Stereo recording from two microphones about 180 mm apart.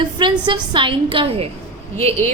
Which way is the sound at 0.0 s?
25° right (ahead or behind).